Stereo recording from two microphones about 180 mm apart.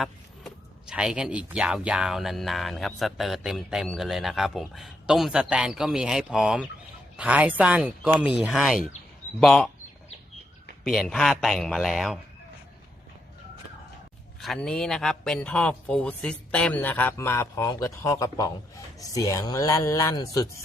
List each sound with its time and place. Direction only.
0.0 s speech: centre (ahead or behind)
10.8 s speech: centre (ahead or behind)
14.4 s speech: centre (ahead or behind); by 20.5 s 20° left (ahead or behind)